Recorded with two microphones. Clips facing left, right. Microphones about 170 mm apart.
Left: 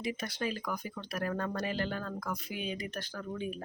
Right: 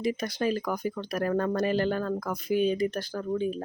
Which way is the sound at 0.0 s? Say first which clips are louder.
Right 7 dB; 40° right (ahead or behind).